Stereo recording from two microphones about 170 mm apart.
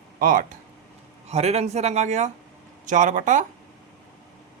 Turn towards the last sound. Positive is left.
turn(degrees=-50)  # may be behind; listen again after turning